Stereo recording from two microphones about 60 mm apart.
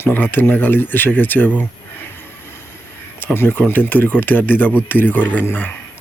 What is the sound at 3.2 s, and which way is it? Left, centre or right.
Speech, left.